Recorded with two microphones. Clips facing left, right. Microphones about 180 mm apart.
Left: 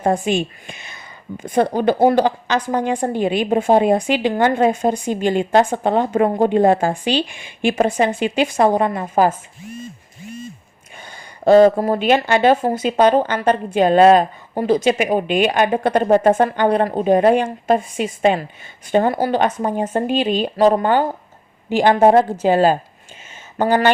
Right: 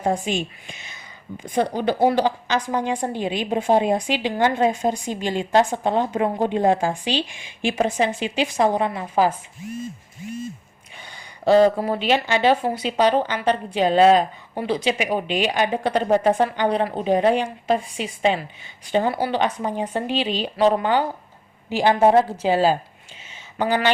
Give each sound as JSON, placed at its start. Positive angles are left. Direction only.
{"t": 0.0, "sound": "a woman's voice", "side_deg": 55}
{"t": 11.4, "sound": "a woman's voice", "side_deg": 45}
{"t": 23.3, "sound": "a sound", "side_deg": 50}